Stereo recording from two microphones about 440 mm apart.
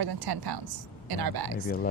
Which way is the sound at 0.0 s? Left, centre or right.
Right.